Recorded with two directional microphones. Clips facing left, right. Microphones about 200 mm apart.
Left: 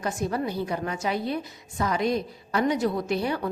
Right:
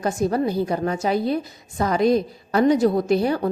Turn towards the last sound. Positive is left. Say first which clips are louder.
# right 7 dB
turn(degrees=-40)  # may be behind; listen again after turning